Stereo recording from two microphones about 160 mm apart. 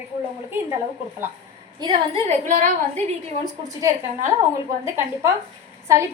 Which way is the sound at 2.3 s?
50° right (ahead or behind).